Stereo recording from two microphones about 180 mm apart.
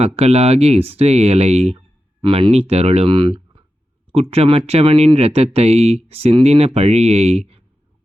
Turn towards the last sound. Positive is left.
turn(degrees=-35)  # may be behind; listen again after turning